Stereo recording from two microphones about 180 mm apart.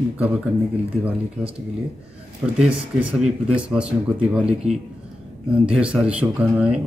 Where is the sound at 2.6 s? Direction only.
5° right (ahead or behind).